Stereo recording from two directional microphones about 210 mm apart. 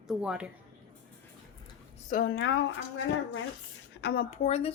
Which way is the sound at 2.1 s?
55° left (ahead or behind).